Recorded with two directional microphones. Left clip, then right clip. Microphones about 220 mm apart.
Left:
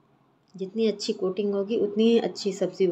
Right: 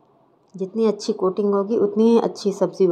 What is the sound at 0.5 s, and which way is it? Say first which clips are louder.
Speech: right 5 dB; 20° right (ahead or behind).